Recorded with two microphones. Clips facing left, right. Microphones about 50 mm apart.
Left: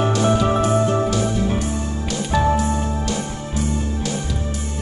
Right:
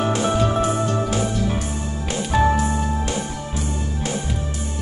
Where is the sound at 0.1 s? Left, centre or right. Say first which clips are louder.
Left 2 dB; right.